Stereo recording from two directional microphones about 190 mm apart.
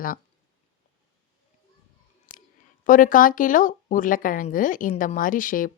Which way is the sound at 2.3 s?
45° left (ahead or behind).